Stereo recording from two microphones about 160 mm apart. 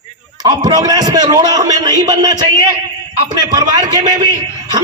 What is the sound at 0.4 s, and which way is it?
A man's voice, 25° right (ahead or behind).